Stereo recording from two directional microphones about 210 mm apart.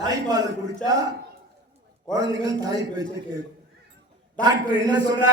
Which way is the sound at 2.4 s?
15° right (ahead or behind).